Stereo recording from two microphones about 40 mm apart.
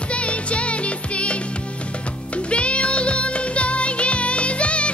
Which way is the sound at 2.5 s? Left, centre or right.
Left.